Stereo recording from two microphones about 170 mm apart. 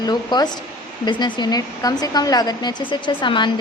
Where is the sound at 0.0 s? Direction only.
25° left (ahead or behind).